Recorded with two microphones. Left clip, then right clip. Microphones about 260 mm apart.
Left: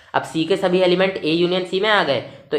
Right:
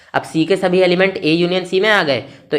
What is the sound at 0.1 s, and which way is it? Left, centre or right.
A woman's voice, right.